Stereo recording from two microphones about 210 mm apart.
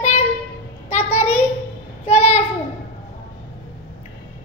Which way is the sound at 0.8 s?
30° left (ahead or behind).